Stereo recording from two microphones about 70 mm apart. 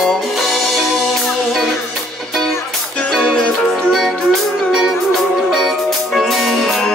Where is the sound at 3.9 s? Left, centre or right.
Centre.